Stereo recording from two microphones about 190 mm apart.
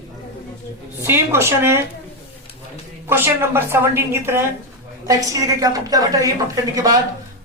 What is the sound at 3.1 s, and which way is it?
A woman's voice, 10° right (ahead or behind).